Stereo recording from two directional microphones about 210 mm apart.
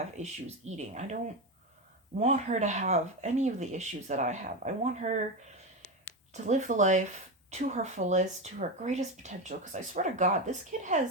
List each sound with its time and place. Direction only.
0.2 s speech: 35° right (ahead or behind)
2.1 s speech: 35° right (ahead or behind)
6.3 s speech: 35° right (ahead or behind)